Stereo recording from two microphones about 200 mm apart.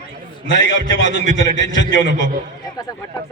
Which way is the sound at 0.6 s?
70° left (ahead or behind).